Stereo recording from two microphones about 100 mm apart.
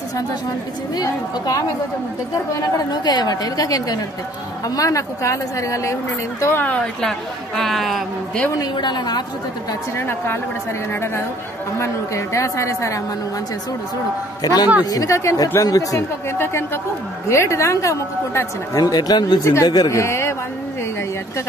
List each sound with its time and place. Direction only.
0.9 s a woman's voice: 40° left (ahead or behind)
2.9 s a woman's voice: 40° left (ahead or behind)
6.4 s a woman's voice: 20° left (ahead or behind)
7.0 s speech: 5° left (ahead or behind)
8.5 s a woman's voice: 45° left (ahead or behind)
9.9 s a woman's voice: 25° left (ahead or behind)
14.4 s a woman's voice: 40° left (ahead or behind)
16.3 s a woman's voice: 25° left (ahead or behind)
18.8 s a woman's voice: 40° left (ahead or behind)
19.4 s a woman's voice: 30° left (ahead or behind)
19.7 s a woman's voice: 40° left (ahead or behind)
20.0 s a man's voice: 25° left (ahead or behind)